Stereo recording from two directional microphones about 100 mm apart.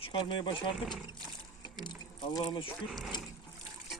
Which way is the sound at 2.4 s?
55° left (ahead or behind).